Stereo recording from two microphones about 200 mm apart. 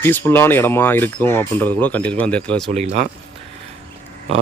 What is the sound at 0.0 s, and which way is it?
Speech, 10° left (ahead or behind).